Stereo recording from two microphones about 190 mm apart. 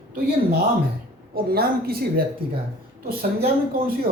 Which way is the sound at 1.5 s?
55° right (ahead or behind).